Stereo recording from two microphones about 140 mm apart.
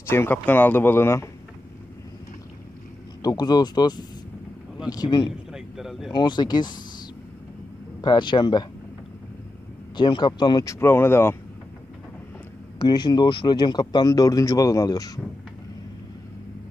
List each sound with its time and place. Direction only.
0.0 s speech: 15° left (ahead or behind)
3.2 s speech: 30° left (ahead or behind)
5.3 s a sound: 5° right (ahead or behind)
6.1 s speech: 30° left (ahead or behind)
8.0 s speech: 35° left (ahead or behind)
9.9 s speech: 30° left (ahead or behind); by 11.3 s 15° left (ahead or behind)
12.7 s speech: 30° left (ahead or behind)